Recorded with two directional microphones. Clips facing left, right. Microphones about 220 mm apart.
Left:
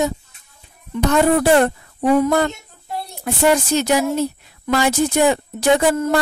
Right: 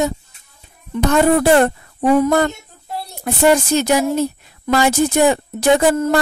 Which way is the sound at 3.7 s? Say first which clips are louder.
Right 2 dB; 45° right (ahead or behind).